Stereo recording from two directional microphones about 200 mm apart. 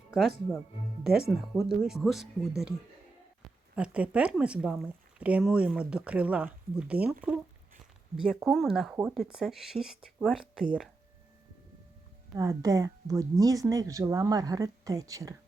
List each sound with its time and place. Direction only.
0.1 s speech: centre (ahead or behind)
1.7 s speech: centre (ahead or behind)
3.8 s speech: 5° right (ahead or behind)
12.4 s speech: 15° right (ahead or behind)